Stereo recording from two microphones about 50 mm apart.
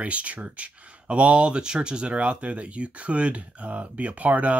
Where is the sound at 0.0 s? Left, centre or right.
Right.